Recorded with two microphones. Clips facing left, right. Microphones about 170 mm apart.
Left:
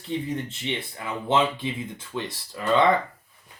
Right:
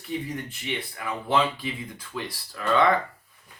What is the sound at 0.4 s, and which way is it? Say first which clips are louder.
Speech: left 2 dB; 25° left (ahead or behind).